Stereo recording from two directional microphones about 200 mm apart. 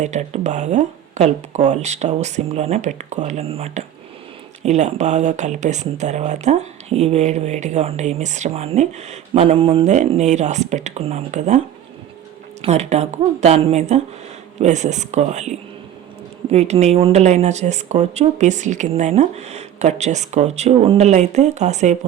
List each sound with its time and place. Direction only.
0.0 s speech: 35° right (ahead or behind)
12.6 s speech: 35° right (ahead or behind)